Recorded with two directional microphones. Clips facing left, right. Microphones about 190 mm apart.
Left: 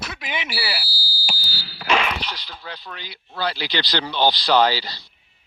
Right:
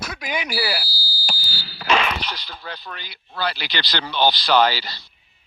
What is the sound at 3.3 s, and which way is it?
Speech, 15° left (ahead or behind).